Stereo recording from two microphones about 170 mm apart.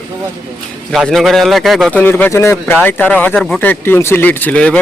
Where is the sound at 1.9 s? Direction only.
10° left (ahead or behind).